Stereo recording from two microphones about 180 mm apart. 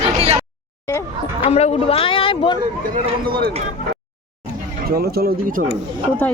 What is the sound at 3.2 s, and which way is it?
Speech, 55° right (ahead or behind).